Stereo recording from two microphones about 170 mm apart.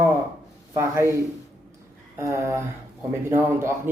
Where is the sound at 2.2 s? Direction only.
15° right (ahead or behind).